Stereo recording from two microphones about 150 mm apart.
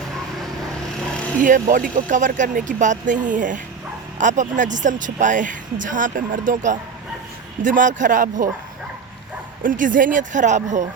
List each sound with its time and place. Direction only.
1.4 s a woman's voice: 60° right (ahead or behind)
9.6 s a woman's voice: 60° right (ahead or behind)